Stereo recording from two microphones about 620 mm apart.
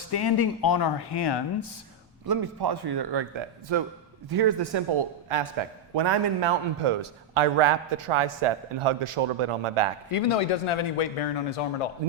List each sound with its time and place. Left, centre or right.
0.1 s speech: left
2.2 s a man's voice: right
10.1 s speech: left